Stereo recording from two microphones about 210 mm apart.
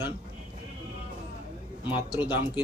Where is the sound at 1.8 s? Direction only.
5° right (ahead or behind).